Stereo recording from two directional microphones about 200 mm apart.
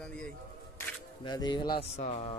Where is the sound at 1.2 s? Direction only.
20° left (ahead or behind).